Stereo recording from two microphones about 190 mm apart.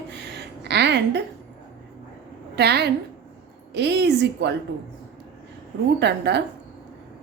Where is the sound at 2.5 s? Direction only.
60° right (ahead or behind).